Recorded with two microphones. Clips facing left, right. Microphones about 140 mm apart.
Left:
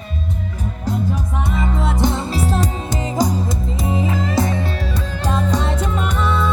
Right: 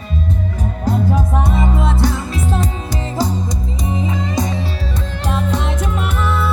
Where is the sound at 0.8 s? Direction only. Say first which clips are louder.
Right 5 dB; 45° right (ahead or behind).